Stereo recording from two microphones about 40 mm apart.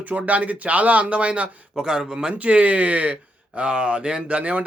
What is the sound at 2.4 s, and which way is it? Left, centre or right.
Speech, right.